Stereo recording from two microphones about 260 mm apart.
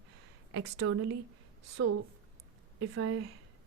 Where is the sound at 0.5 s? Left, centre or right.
Right.